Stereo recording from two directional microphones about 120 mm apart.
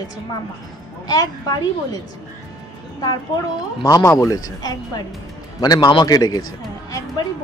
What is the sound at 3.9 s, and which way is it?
A woman's voice, 25° left (ahead or behind).